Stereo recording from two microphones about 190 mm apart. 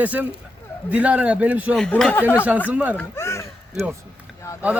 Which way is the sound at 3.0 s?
15° left (ahead or behind).